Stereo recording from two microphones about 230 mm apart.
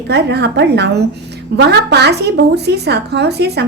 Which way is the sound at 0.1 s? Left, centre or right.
Right.